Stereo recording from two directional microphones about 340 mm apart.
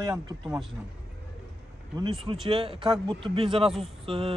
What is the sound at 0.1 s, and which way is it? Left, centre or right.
Speech, centre.